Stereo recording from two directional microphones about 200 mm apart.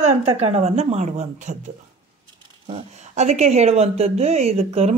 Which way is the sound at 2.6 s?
35° right (ahead or behind).